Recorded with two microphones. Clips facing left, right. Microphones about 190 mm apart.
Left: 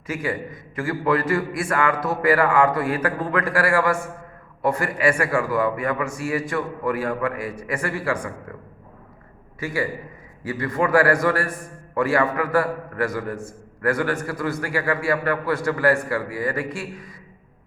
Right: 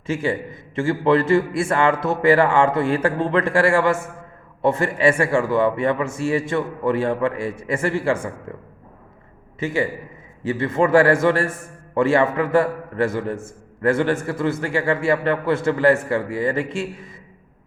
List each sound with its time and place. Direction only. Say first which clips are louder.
0.1 s a man's voice: right 4 dB; 25° right (ahead or behind)
9.6 s a man's voice: right 3 dB; 25° right (ahead or behind)